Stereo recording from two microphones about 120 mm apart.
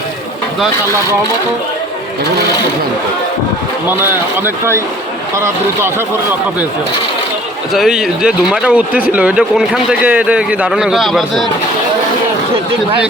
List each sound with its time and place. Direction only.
4.4 s speech: 20° right (ahead or behind)
7.7 s speech: 5° right (ahead or behind)